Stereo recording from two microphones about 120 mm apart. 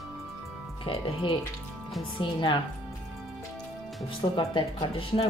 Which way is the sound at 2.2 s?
45° left (ahead or behind).